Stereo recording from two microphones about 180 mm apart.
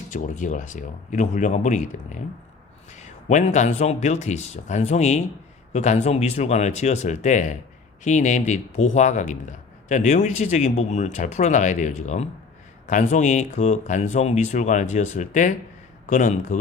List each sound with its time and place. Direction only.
0.1 s a man's voice: 45° left (ahead or behind)